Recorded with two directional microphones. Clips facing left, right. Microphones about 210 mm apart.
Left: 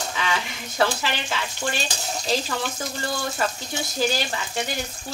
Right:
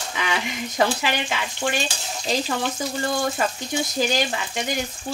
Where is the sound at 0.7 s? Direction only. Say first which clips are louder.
Right 1 dB; 15° right (ahead or behind).